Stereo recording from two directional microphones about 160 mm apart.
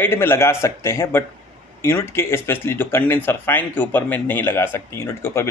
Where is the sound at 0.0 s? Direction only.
15° left (ahead or behind).